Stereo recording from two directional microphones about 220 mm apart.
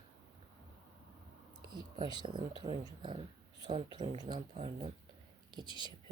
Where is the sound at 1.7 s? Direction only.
20° right (ahead or behind).